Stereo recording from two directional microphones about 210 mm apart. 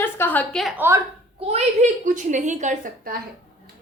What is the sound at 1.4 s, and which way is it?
A woman's voice, 30° right (ahead or behind).